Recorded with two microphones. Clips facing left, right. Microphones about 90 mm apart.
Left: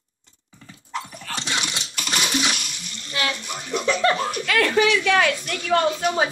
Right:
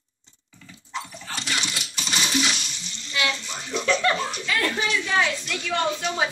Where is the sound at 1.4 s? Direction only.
25° left (ahead or behind).